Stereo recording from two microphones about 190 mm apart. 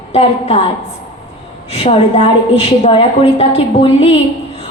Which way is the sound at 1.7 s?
30° left (ahead or behind).